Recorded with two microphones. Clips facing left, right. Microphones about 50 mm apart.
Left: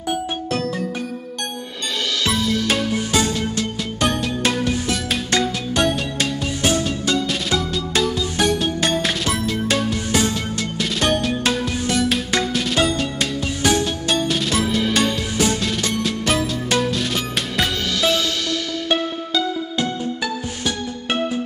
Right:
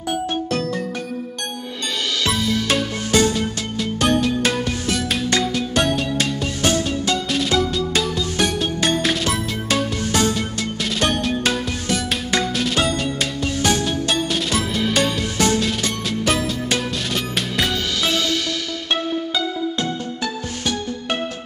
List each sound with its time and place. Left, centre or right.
0.5 s music: centre
2.7 s music: centre